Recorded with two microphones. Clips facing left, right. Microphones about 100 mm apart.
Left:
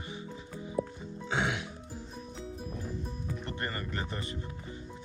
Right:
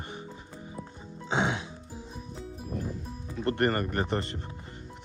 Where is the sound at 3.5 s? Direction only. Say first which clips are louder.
Right 11 dB; 65° right (ahead or behind).